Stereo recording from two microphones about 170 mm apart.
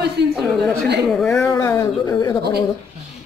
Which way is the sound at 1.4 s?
15° left (ahead or behind).